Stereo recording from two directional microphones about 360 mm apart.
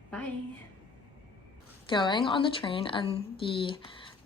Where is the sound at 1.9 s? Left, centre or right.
Centre.